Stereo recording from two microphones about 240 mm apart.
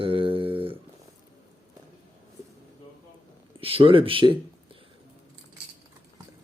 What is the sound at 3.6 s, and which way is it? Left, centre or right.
Speech, right.